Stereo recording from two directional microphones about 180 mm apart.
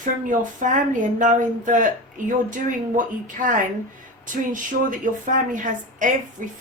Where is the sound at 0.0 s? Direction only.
45° right (ahead or behind).